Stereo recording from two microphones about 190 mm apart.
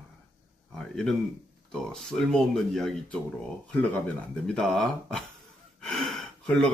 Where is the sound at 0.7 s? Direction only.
Centre (ahead or behind).